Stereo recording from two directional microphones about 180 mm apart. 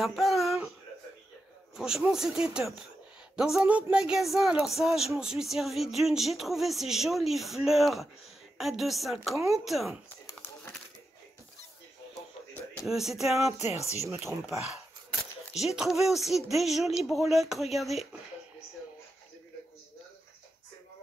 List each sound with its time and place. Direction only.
0.0 s a sound: centre (ahead or behind)
1.8 s speech: centre (ahead or behind)
12.8 s speech: centre (ahead or behind)
13.6 s speech: 35° left (ahead or behind)
14.0 s speech: 15° right (ahead or behind)
15.5 s speech: 5° right (ahead or behind)